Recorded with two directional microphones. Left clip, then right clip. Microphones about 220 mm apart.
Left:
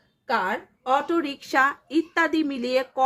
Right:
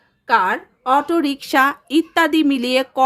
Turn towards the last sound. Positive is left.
turn(degrees=-30)  # may be behind; listen again after turning